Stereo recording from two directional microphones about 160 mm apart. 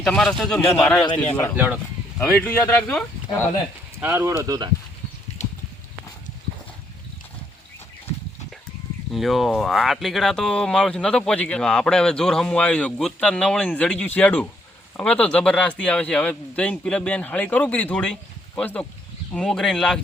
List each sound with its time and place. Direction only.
0.0 s speech: 5° left (ahead or behind)
2.1 s speech: 10° left (ahead or behind)
4.0 s speech: 15° right (ahead or behind)
5.4 s clip-clop: 45° left (ahead or behind)
9.1 s speech: centre (ahead or behind)